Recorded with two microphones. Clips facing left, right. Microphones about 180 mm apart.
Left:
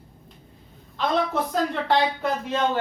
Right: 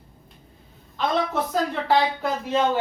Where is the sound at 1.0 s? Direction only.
Centre (ahead or behind).